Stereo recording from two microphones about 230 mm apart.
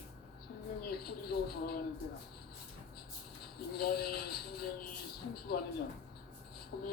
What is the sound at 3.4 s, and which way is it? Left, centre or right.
Speech, left.